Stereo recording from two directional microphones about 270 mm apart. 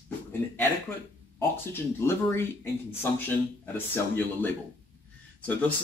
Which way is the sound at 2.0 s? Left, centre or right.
Centre.